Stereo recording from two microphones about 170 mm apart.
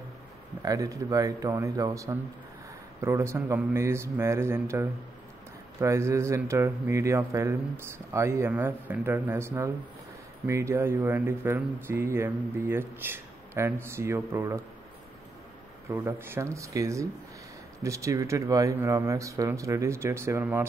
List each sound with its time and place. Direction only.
0.6 s speech: 20° right (ahead or behind)
15.9 s speech: 15° right (ahead or behind)